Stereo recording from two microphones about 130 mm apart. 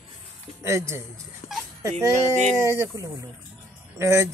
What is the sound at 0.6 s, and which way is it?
Speech, 20° right (ahead or behind).